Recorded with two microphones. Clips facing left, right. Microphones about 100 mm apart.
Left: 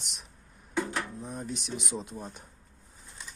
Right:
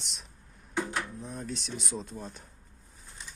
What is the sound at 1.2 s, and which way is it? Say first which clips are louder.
Speech: left 1 dB; 15° left (ahead or behind).